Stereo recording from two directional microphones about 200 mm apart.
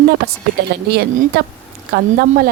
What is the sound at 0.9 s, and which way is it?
Speech, 50° right (ahead or behind).